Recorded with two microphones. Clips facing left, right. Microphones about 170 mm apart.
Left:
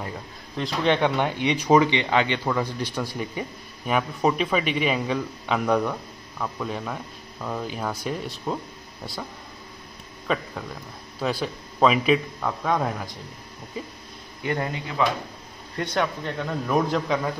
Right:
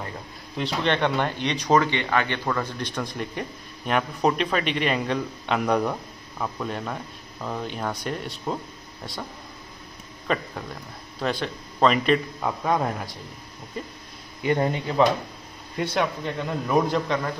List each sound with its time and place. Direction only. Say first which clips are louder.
0.6 s speech: left 2 dB; 5° left (ahead or behind)
10.2 s speech: even; centre (ahead or behind)
12.4 s speech: right 1 dB; 5° right (ahead or behind)
14.4 s speech: right 4 dB; 25° right (ahead or behind)
15.8 s speech: right 1 dB; 5° right (ahead or behind)